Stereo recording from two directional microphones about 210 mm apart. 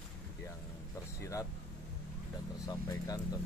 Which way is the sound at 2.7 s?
15° left (ahead or behind).